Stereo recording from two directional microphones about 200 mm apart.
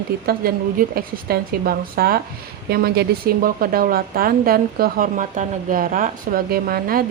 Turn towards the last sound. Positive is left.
turn(degrees=-45)  # may be behind; listen again after turning